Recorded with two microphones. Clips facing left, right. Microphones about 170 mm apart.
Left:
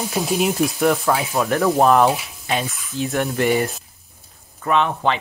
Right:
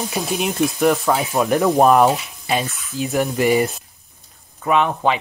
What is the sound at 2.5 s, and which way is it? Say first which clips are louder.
Speech: right 2 dB; centre (ahead or behind).